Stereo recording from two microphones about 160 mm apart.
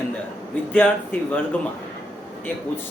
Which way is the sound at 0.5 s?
10° left (ahead or behind).